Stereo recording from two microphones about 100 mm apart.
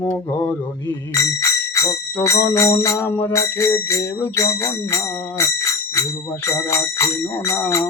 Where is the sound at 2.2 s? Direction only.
30° left (ahead or behind).